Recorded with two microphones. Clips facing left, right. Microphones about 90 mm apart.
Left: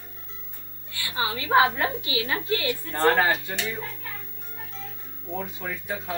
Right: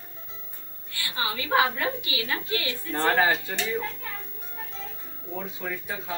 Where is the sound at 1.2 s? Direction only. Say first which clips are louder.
Left 3 dB; 30° left (ahead or behind).